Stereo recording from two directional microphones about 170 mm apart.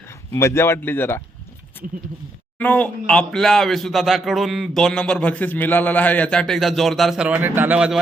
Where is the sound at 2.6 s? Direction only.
10° left (ahead or behind).